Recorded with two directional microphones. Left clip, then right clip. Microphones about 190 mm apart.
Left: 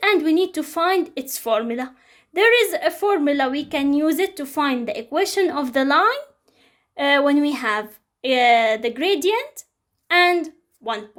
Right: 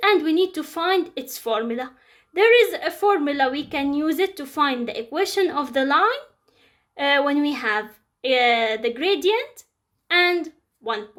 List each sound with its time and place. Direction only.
0.0 s speech: 40° left (ahead or behind)